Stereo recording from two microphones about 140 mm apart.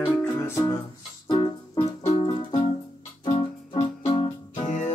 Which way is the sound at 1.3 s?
35° left (ahead or behind).